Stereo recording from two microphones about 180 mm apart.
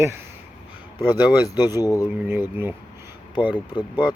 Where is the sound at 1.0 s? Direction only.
20° left (ahead or behind).